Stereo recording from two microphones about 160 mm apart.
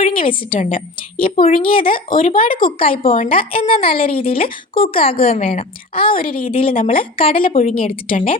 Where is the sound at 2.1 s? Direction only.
60° left (ahead or behind).